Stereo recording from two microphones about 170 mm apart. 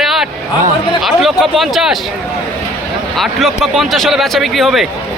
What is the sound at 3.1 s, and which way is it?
Speech, centre (ahead or behind).